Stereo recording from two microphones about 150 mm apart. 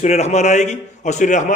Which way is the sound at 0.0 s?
50° left (ahead or behind).